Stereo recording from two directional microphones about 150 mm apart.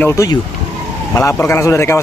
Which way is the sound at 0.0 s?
20° left (ahead or behind).